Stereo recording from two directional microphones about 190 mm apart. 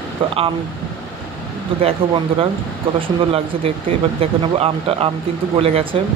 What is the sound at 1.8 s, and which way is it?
Speech, 30° right (ahead or behind).